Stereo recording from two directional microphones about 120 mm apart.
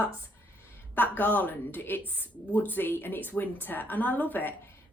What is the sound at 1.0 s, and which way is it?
A woman's voice, 15° left (ahead or behind).